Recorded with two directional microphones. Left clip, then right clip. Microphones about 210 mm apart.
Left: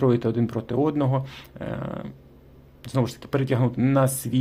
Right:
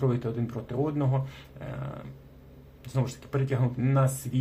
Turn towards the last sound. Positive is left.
turn(degrees=45)  # may be behind; listen again after turning